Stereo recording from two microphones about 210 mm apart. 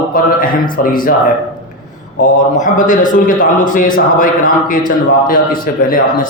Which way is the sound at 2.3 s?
35° left (ahead or behind).